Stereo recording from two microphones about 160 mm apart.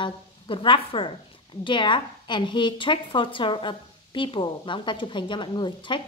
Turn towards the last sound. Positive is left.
turn(degrees=30)  # may be behind; listen again after turning